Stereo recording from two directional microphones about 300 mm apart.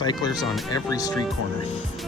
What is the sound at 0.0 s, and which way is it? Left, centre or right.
Speech, centre.